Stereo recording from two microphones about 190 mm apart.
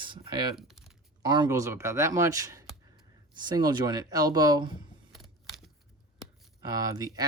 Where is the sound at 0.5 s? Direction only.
Centre (ahead or behind).